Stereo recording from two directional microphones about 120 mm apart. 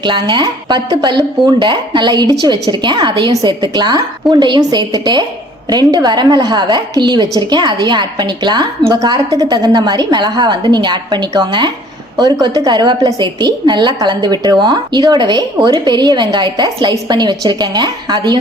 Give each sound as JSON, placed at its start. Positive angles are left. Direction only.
{"t": 0.0, "sound": "a woman's voice", "side_deg": -40}